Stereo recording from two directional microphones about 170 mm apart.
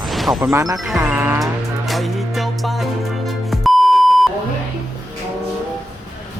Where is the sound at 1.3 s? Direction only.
Centre (ahead or behind).